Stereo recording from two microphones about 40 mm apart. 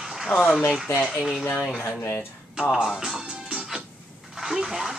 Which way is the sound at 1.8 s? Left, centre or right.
Left.